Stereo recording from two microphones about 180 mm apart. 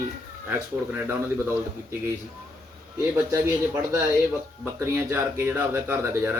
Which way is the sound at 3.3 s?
15° right (ahead or behind).